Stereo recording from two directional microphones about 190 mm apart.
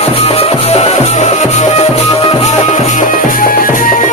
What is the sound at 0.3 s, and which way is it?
Music, 30° left (ahead or behind).